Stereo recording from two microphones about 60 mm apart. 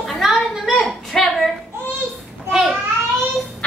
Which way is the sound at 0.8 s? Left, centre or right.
Centre.